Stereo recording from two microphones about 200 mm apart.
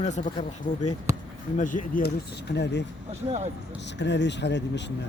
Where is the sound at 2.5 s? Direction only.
60° left (ahead or behind).